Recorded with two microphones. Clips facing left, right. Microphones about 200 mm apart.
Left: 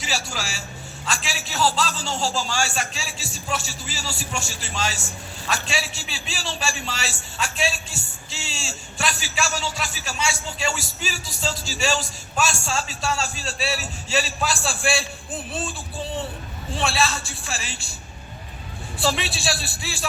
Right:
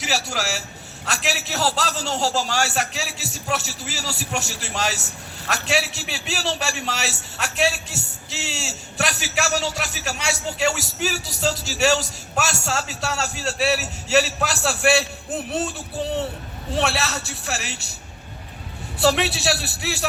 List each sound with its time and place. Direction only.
0.0 s a man's voice: 65° right (ahead or behind)
16.7 s a man's voice: 70° right (ahead or behind)
18.9 s a man's voice: 70° right (ahead or behind)